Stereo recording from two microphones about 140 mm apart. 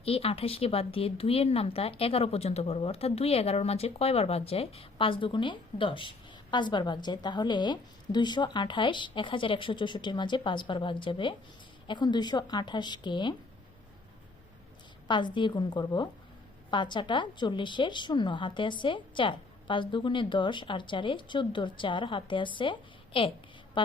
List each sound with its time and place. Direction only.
0.0 s speech: 45° left (ahead or behind)
15.0 s speech: 35° left (ahead or behind)